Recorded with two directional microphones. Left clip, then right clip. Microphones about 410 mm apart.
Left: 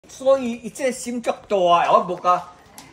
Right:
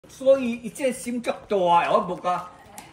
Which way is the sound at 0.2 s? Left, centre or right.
Centre.